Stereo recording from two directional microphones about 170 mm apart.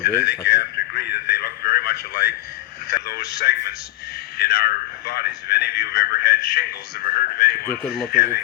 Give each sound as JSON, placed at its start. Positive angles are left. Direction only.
{"t": 0.0, "sound": "radio", "side_deg": 65}
{"t": 2.9, "sound": "speech", "side_deg": 70}